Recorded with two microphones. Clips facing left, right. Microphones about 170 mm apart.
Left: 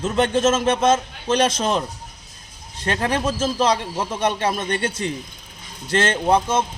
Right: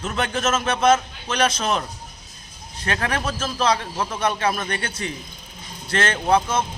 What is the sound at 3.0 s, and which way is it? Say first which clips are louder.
A man's voice: left 6 dB; 25° left (ahead or behind).